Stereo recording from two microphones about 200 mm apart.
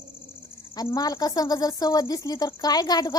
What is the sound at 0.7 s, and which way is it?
A woman's voice, 20° left (ahead or behind).